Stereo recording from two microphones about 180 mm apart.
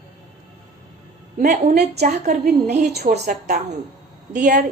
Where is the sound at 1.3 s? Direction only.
45° right (ahead or behind).